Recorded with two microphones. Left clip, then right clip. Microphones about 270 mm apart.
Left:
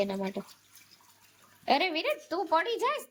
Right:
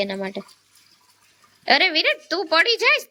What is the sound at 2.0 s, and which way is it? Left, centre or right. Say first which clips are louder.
A woman's voice: right 9 dB; right.